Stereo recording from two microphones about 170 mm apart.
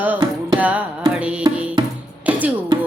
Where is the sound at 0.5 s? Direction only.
10° right (ahead or behind).